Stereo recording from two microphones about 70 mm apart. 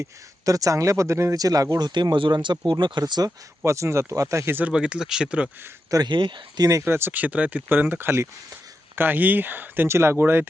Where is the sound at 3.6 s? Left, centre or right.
Right.